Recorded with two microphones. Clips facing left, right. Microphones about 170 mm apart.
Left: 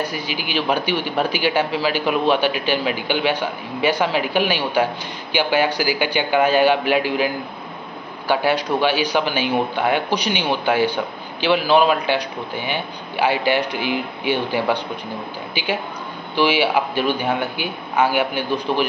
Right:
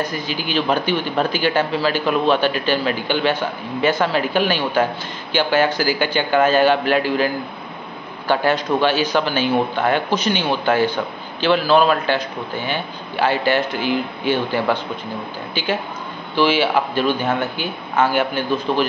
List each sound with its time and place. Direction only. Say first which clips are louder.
0.0 s a man's voice: right 1 dB; 10° left (ahead or behind)